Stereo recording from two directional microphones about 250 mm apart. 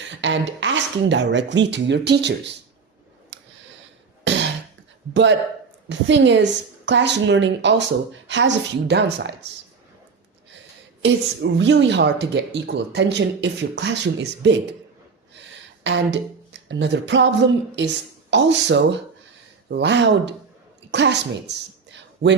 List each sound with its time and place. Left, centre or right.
0.1 s a woman's voice: right
3.3 s a sound: right
4.2 s throat clearing: right
5.9 s a woman's voice: right
11.0 s a woman's voice: right
21.9 s a sound: right